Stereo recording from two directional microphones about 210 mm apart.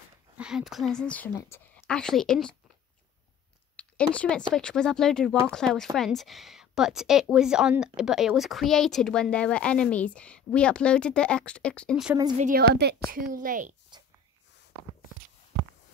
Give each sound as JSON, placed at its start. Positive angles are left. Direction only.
{"t": 0.4, "sound": "speech", "side_deg": -5}
{"t": 3.7, "sound": "speech", "side_deg": 5}
{"t": 12.4, "sound": "a woman's voice", "side_deg": -40}